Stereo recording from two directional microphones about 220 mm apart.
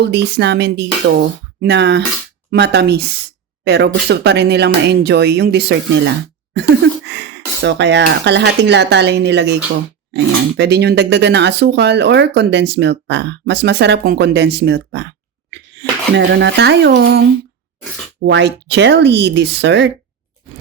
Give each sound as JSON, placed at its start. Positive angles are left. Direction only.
{"t": 0.0, "sound": "speech", "side_deg": -50}
{"t": 10.6, "sound": "speech", "side_deg": -50}